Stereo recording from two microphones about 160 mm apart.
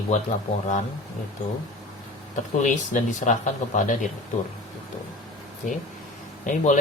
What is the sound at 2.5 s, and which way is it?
Speech, 50° left (ahead or behind).